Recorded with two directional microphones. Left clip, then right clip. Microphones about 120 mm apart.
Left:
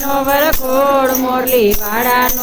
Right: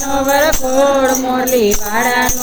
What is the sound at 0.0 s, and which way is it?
Music, 10° left (ahead or behind).